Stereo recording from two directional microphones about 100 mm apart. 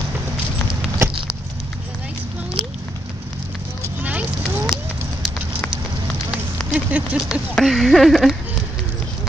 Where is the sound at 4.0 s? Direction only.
15° right (ahead or behind).